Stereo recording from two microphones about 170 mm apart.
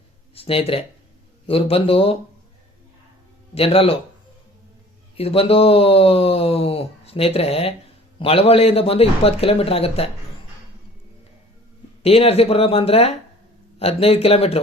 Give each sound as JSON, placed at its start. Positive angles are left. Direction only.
{"t": 0.3, "sound": "speech", "side_deg": 35}
{"t": 3.5, "sound": "speech", "side_deg": 35}
{"t": 5.1, "sound": "speech", "side_deg": 35}
{"t": 12.0, "sound": "speech", "side_deg": 35}